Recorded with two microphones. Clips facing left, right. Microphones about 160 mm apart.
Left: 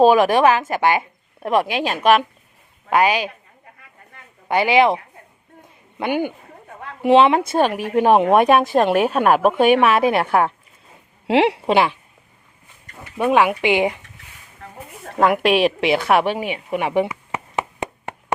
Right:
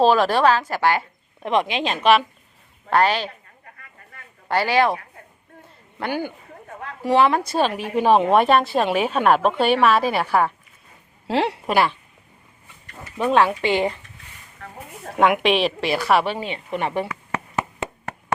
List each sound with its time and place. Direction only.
0.0 s a woman's voice: 15° left (ahead or behind)
4.4 s speech: 20° left (ahead or behind)
5.6 s a sound: 15° left (ahead or behind)
7.0 s a woman's voice: 20° left (ahead or behind)
11.3 s a woman's voice: 70° left (ahead or behind)
11.5 s speech: 25° left (ahead or behind)
13.0 s a woman's voice: 10° left (ahead or behind)
15.0 s a woman's voice: centre (ahead or behind)
15.8 s a woman's voice: 20° left (ahead or behind)
16.6 s a sound: 5° left (ahead or behind)